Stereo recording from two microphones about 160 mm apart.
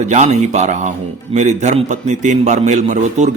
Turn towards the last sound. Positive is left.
turn(degrees=-50)  # may be behind; listen again after turning